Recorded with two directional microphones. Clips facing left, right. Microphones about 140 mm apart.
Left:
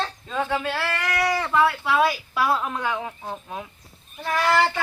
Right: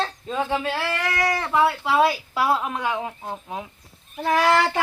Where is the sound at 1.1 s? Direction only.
Centre (ahead or behind).